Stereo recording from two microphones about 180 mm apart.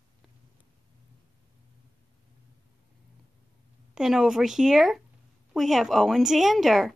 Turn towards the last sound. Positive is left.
turn(degrees=0)  # may be behind; listen again after turning